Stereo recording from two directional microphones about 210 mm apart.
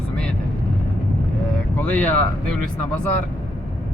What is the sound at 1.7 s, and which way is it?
Speech, 5° left (ahead or behind).